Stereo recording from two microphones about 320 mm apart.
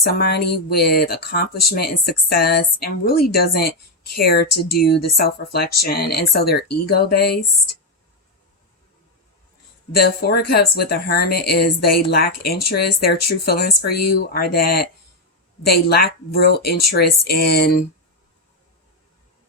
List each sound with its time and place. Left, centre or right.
0.0 s speech: left
9.9 s speech: left